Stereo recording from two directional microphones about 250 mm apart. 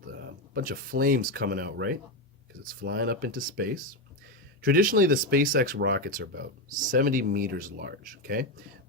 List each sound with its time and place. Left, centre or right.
0.5 s speech: right